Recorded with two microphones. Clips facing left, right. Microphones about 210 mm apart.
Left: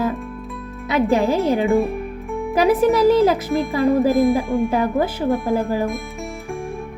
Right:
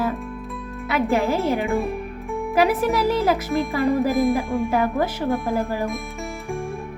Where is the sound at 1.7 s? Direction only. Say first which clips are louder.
Left 5 dB; centre (ahead or behind).